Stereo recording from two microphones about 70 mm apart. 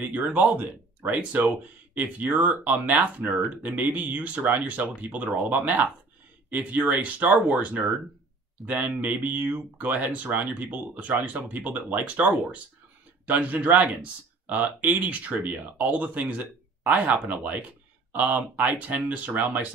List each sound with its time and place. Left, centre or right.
0.0 s speech: right